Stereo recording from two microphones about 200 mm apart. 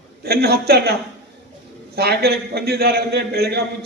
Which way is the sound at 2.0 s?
55° right (ahead or behind).